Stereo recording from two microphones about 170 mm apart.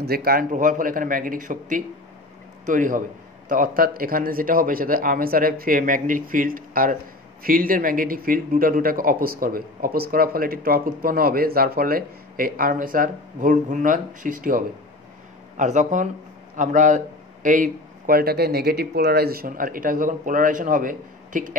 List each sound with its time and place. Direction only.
0.0 s speech: 65° right (ahead or behind)